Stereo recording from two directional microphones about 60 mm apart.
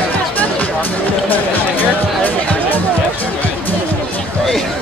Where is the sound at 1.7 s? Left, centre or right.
Left.